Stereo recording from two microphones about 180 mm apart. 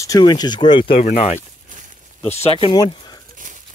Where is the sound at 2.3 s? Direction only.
35° left (ahead or behind).